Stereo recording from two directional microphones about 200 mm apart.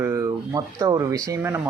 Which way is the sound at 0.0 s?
15° right (ahead or behind).